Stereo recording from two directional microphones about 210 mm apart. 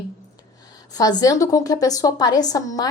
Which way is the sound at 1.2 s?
15° left (ahead or behind).